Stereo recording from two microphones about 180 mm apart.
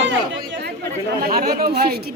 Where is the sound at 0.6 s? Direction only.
65° right (ahead or behind).